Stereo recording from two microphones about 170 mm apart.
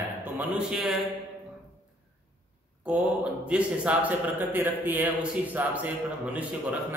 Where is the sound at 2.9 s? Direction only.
5° right (ahead or behind).